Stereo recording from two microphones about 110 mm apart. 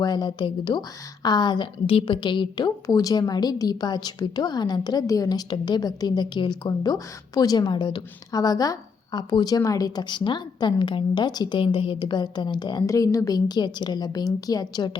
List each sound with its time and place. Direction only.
0.0 s a woman's voice: 40° left (ahead or behind)